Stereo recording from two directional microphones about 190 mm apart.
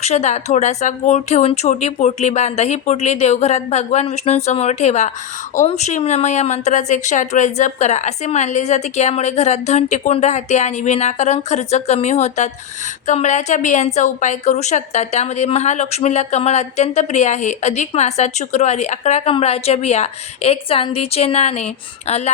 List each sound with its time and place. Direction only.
0.0 s a woman's voice: 35° left (ahead or behind)